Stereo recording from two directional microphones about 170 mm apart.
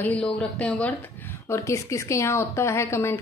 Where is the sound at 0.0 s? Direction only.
10° left (ahead or behind).